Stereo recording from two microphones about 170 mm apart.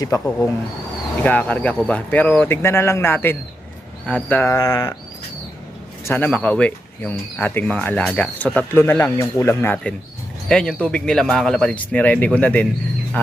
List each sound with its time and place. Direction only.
0.3 s speech: 5° left (ahead or behind)
6.1 s a man's voice: 10° left (ahead or behind)